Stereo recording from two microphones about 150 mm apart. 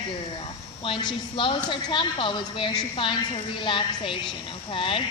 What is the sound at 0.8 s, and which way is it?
A woman's voice, 35° left (ahead or behind).